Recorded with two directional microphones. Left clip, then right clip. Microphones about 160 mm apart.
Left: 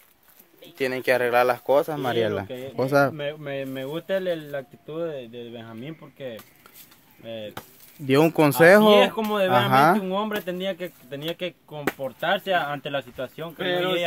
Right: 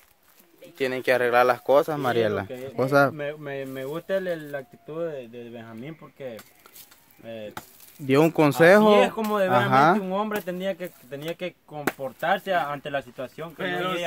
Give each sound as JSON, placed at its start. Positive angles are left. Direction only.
{"t": 0.7, "sound": "speech", "side_deg": -5}
{"t": 2.4, "sound": "speech", "side_deg": 10}
{"t": 2.7, "sound": "speech", "side_deg": -10}
{"t": 3.2, "sound": "speech", "side_deg": 10}
{"t": 8.1, "sound": "speech", "side_deg": -5}
{"t": 10.0, "sound": "speech", "side_deg": 10}
{"t": 13.6, "sound": "speech", "side_deg": -25}